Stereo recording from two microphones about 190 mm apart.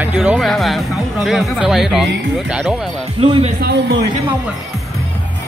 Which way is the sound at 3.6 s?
65° right (ahead or behind).